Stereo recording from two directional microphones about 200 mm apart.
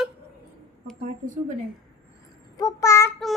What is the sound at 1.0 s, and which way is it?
Speech, 40° right (ahead or behind).